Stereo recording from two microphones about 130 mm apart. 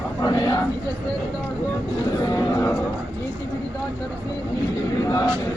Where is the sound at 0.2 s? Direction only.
30° left (ahead or behind).